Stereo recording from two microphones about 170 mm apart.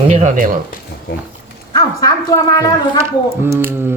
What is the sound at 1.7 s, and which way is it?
A woman's voice, 20° left (ahead or behind).